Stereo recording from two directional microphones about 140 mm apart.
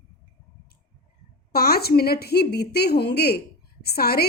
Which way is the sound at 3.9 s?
90° left.